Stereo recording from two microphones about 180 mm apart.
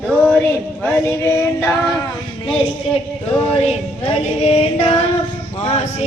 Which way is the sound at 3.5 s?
35° left (ahead or behind).